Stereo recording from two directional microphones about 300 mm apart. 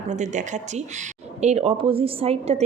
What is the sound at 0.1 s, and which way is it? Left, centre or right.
A woman's voice, right.